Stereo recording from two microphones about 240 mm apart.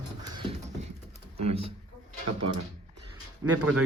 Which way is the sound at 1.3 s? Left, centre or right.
Right.